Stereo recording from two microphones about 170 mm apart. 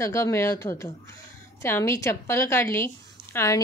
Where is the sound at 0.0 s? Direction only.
15° left (ahead or behind).